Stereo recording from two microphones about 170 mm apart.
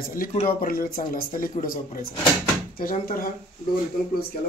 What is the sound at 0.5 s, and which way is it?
Speech, 55° left (ahead or behind).